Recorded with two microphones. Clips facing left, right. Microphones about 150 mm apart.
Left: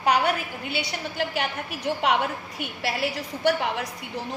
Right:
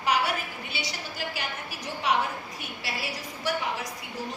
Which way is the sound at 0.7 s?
60° left (ahead or behind).